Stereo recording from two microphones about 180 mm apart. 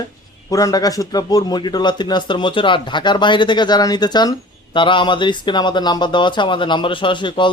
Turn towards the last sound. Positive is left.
turn(degrees=25)  # may be behind; listen again after turning